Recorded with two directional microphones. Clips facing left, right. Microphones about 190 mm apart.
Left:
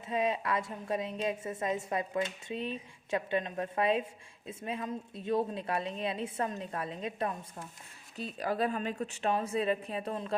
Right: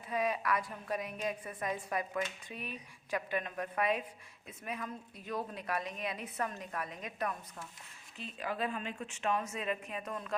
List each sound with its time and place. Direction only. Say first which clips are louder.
0.1 s a woman's voice: left 2 dB; 25° left (ahead or behind)
8.1 s a woman's voice: left 6 dB; 40° left (ahead or behind)